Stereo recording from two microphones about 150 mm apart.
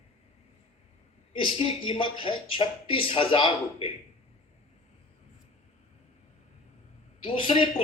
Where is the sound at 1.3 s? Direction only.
40° left (ahead or behind).